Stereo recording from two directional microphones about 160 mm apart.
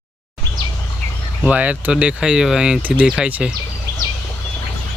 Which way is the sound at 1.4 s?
10° right (ahead or behind).